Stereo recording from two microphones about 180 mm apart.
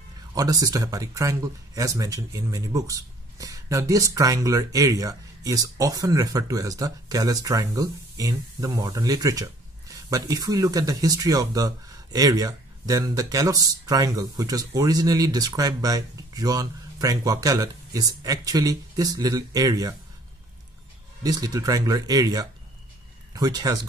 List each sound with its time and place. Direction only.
0.3 s speech: 20° right (ahead or behind)
21.2 s speech: 20° right (ahead or behind)